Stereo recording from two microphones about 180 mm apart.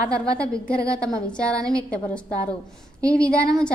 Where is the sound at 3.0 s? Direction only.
5° left (ahead or behind).